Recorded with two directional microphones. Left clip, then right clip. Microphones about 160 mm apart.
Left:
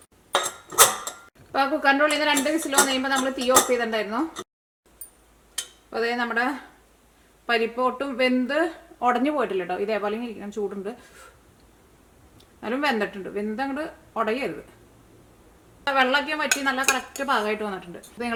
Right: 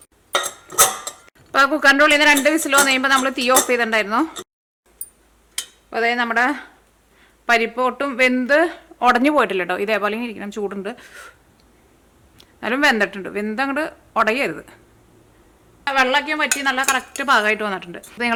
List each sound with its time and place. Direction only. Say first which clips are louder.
0.3 s cutlery: right 3 dB; 5° right (ahead or behind)
1.5 s speech: right 7 dB; 35° right (ahead or behind)
5.9 s speech: right 6 dB; 20° right (ahead or behind)
12.4 s speech: right 8 dB; 25° right (ahead or behind)
15.9 s a woman's voice: right 4 dB; 15° right (ahead or behind)